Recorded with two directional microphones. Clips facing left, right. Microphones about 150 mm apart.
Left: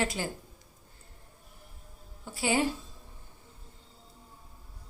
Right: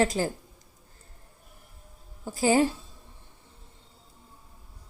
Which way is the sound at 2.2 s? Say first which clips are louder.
Right 6 dB; 40° right (ahead or behind).